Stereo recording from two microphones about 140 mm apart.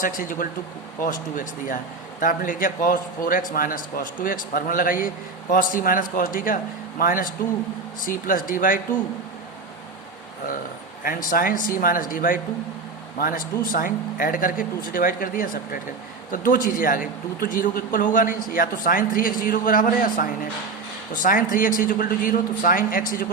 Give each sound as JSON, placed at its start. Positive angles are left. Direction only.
{"t": 0.0, "sound": "a man's voice", "side_deg": 80}
{"t": 1.0, "sound": "a man's voice", "side_deg": 65}
{"t": 3.5, "sound": "a man's voice", "side_deg": 90}
{"t": 7.0, "sound": "a man's voice", "side_deg": 85}
{"t": 11.0, "sound": "a man's voice", "side_deg": 80}